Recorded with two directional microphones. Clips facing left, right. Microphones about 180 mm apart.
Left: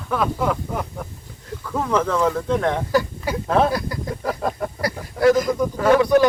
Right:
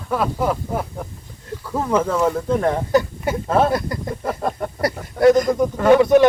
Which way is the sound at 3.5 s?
Centre (ahead or behind).